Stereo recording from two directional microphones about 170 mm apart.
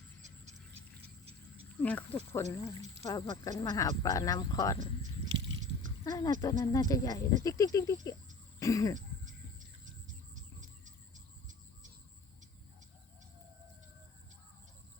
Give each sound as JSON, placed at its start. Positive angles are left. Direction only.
{"t": 1.0, "sound": "a sound", "side_deg": -35}
{"t": 1.7, "sound": "speech", "side_deg": 10}
{"t": 6.1, "sound": "speech", "side_deg": 20}
{"t": 8.5, "sound": "cough", "side_deg": 20}
{"t": 10.3, "sound": "bird", "side_deg": -50}